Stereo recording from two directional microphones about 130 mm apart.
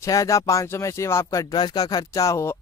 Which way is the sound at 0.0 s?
25° left (ahead or behind).